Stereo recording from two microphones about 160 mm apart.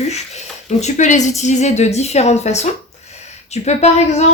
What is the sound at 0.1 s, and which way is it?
Speech, 45° left (ahead or behind).